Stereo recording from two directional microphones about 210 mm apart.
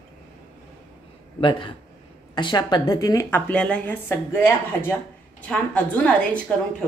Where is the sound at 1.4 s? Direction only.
20° left (ahead or behind); by 6.4 s 5° left (ahead or behind).